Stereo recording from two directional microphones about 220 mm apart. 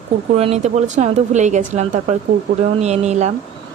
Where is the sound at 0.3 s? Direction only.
30° right (ahead or behind).